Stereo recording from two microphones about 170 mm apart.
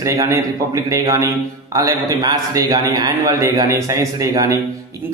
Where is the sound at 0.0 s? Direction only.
20° right (ahead or behind).